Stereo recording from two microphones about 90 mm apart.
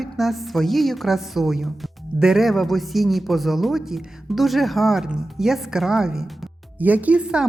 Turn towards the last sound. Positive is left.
turn(degrees=-10)  # may be behind; listen again after turning